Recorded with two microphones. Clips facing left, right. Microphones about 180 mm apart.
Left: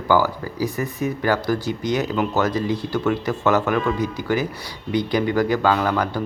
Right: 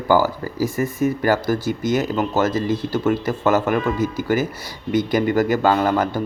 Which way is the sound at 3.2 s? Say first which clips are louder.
Right 1 dB; 40° right (ahead or behind).